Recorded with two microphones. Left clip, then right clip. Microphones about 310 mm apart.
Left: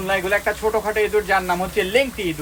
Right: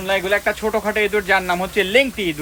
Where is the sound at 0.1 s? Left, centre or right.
Right.